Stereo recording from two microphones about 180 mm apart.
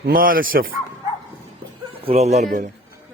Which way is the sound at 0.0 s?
50° right (ahead or behind).